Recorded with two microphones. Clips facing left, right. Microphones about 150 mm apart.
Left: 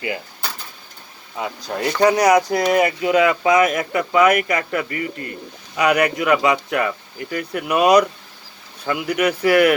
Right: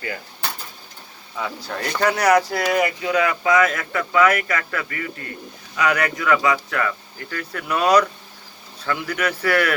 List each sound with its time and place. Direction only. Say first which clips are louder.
1.4 s speech: left 3 dB; 25° left (ahead or behind)